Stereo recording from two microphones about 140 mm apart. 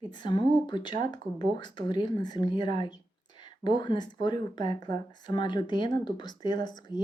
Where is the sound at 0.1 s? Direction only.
35° left (ahead or behind).